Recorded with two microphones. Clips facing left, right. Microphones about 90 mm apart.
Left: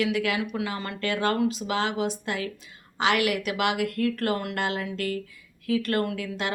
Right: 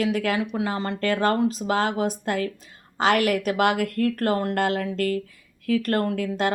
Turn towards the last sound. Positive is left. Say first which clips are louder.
# right 4 dB
turn(degrees=-45)  # may be behind; listen again after turning